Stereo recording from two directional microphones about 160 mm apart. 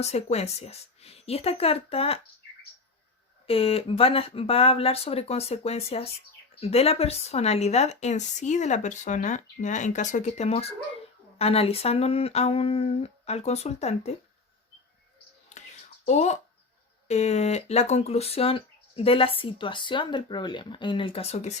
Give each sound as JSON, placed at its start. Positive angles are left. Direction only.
{"t": 0.0, "sound": "speech", "side_deg": 40}
{"t": 3.4, "sound": "a woman's voice", "side_deg": 35}
{"t": 16.0, "sound": "a woman's voice", "side_deg": 45}